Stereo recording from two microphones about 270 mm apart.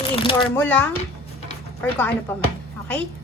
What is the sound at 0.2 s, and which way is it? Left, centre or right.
Speech, centre.